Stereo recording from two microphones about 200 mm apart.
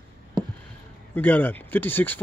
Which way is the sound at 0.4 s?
20° right (ahead or behind).